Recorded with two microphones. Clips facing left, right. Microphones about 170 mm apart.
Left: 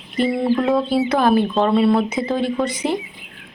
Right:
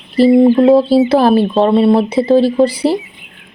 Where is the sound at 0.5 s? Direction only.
30° right (ahead or behind).